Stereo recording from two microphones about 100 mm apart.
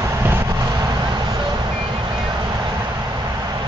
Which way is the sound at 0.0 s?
25° right (ahead or behind).